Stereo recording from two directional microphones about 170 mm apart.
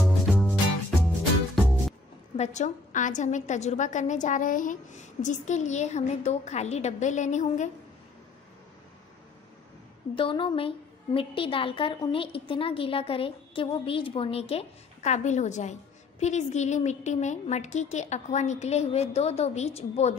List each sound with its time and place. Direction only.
0.0 s music: centre (ahead or behind)
2.3 s a woman's voice: 40° left (ahead or behind)
10.1 s a woman's voice: 30° left (ahead or behind)